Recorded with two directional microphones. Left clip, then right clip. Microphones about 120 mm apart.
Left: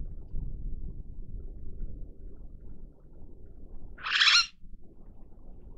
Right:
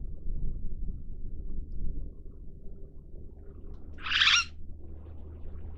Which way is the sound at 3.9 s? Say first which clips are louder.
Left 1 dB; centre (ahead or behind).